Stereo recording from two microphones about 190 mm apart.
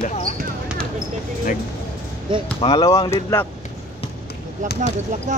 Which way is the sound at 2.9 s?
15° left (ahead or behind).